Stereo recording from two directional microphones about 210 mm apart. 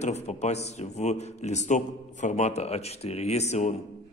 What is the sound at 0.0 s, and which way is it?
A man's voice, 30° left (ahead or behind).